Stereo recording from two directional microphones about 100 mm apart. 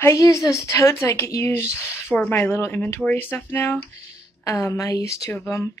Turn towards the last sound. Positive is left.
turn(degrees=20)  # may be behind; listen again after turning